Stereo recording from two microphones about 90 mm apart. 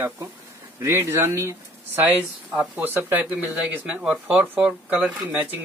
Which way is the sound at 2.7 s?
20° right (ahead or behind).